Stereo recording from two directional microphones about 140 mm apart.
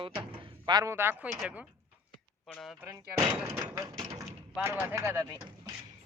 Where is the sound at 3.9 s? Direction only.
35° right (ahead or behind).